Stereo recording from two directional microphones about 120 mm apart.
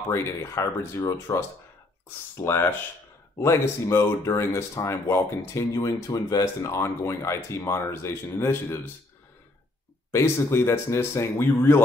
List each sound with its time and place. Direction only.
0.1 s speech: 25° left (ahead or behind)
10.1 s speech: 20° left (ahead or behind)